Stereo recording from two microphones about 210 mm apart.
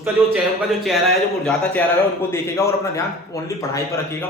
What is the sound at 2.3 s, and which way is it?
Speech, 15° left (ahead or behind).